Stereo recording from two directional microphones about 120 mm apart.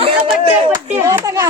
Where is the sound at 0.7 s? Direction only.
25° right (ahead or behind).